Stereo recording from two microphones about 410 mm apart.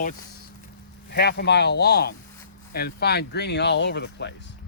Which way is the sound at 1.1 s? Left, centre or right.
Left.